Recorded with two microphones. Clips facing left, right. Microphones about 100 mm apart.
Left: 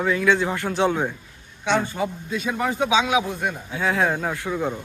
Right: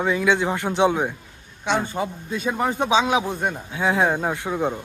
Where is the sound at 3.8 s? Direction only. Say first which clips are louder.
Right 2 dB; 20° right (ahead or behind).